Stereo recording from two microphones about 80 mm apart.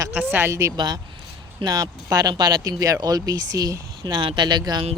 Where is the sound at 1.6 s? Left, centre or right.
Right.